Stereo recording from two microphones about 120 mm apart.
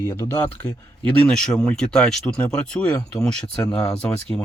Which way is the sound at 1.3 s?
5° left (ahead or behind).